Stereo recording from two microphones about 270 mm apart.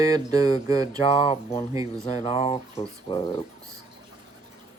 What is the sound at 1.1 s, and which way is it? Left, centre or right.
Speech, left.